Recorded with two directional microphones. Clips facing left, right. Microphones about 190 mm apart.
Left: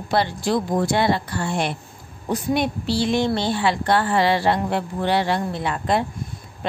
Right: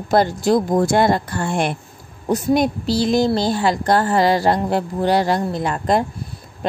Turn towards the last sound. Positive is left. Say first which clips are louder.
# right 3 dB
turn(degrees=-45)  # may be behind; listen again after turning